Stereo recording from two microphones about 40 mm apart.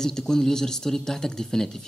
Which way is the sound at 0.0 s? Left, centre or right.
Centre.